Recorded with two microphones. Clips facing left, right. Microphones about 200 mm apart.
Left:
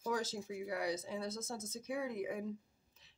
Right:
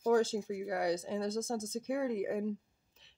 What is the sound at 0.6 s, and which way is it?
Speech, 65° right (ahead or behind).